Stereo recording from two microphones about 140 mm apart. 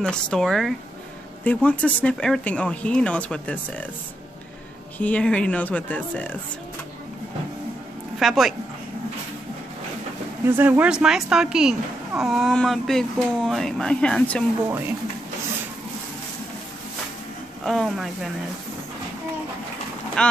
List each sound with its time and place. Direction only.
0.0 s speech: 5° left (ahead or behind)
4.9 s speech: 10° left (ahead or behind)
8.2 s speech: centre (ahead or behind)
10.4 s speech: 15° right (ahead or behind); by 14.4 s 10° left (ahead or behind)
17.6 s speech: centre (ahead or behind)
20.2 s speech: 5° left (ahead or behind)